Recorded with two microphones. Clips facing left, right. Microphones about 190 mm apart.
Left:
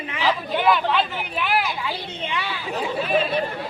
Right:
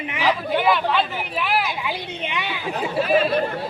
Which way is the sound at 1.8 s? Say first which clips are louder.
Right 1 dB; 15° right (ahead or behind).